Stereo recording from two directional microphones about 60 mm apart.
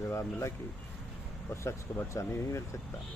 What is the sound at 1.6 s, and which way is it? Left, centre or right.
Speech, left.